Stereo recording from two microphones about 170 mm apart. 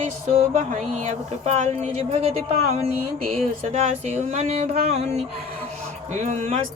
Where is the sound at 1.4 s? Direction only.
40° right (ahead or behind).